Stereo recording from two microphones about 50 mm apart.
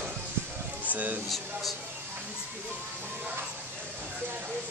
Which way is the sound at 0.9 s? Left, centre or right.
Right.